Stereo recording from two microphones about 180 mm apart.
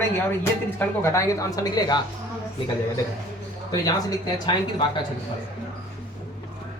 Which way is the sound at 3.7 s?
20° left (ahead or behind).